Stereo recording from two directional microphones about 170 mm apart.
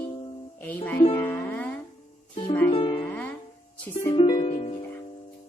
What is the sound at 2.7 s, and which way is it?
Music, 30° left (ahead or behind).